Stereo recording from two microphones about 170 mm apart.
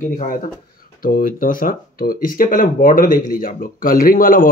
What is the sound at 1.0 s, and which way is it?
Speech, 55° left (ahead or behind).